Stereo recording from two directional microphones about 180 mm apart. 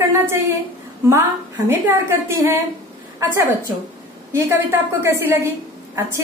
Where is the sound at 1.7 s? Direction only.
15° right (ahead or behind).